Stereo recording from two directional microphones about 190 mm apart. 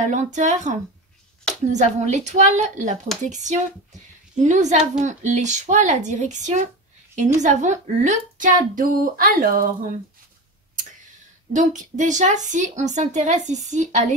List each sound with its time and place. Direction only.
0.0 s a woman's voice: 40° right (ahead or behind)
11.5 s a woman's voice: 40° right (ahead or behind)